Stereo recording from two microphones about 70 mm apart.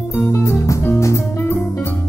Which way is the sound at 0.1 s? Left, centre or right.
Left.